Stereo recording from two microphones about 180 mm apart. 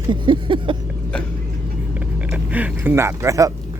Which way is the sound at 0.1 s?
30° right (ahead or behind).